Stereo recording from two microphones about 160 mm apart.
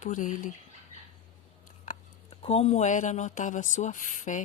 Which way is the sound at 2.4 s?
40° left (ahead or behind).